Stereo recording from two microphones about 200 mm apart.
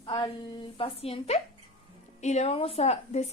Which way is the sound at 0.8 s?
30° left (ahead or behind).